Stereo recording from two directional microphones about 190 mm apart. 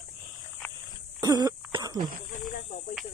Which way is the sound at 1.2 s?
20° right (ahead or behind).